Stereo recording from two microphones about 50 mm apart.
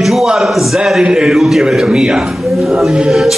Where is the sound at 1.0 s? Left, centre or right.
Centre.